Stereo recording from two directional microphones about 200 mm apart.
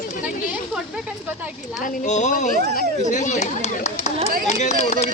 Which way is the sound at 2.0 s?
35° left (ahead or behind).